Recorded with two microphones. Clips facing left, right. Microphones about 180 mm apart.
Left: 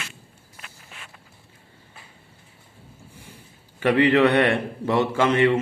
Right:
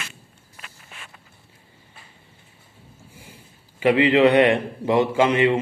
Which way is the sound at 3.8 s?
15° right (ahead or behind).